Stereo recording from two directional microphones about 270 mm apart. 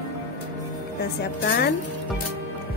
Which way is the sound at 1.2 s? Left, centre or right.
Left.